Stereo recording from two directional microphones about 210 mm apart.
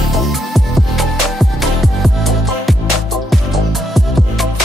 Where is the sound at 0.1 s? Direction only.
Centre (ahead or behind).